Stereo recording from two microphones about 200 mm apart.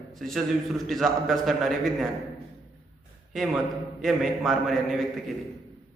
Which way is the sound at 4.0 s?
Centre (ahead or behind).